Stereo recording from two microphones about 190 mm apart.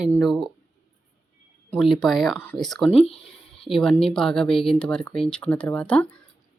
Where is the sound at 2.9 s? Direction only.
30° left (ahead or behind).